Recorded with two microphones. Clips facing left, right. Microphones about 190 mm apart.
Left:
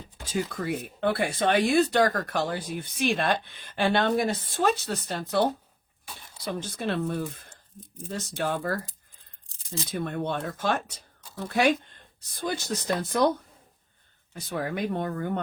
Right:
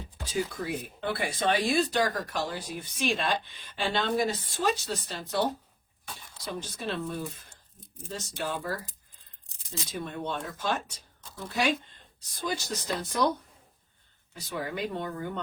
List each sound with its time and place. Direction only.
0.3 s speech: 55° left (ahead or behind)
9.9 s speech: 60° left (ahead or behind)
14.3 s speech: 55° left (ahead or behind)